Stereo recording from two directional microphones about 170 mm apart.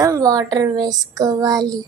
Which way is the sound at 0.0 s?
20° right (ahead or behind).